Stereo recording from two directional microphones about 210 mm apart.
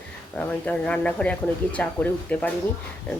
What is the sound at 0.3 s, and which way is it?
Speech, 5° left (ahead or behind).